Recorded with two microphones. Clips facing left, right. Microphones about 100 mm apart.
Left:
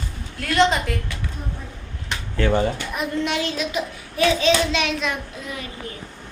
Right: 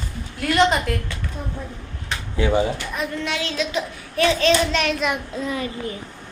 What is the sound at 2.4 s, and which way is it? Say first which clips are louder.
Speech: even; 10° right (ahead or behind).